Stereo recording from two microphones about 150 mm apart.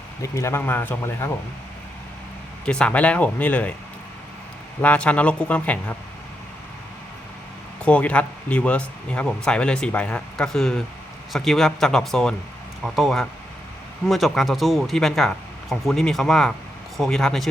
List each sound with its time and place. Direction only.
0.2 s speech: 20° left (ahead or behind)
2.6 s speech: 5° left (ahead or behind)
4.8 s speech: 10° left (ahead or behind)
7.9 s speech: 10° left (ahead or behind)